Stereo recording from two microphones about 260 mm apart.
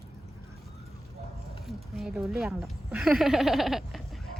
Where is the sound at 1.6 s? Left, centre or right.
Centre.